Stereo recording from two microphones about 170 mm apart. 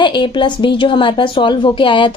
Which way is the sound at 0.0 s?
30° left (ahead or behind).